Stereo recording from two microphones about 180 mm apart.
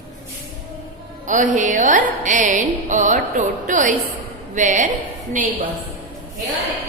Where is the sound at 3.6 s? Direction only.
45° right (ahead or behind).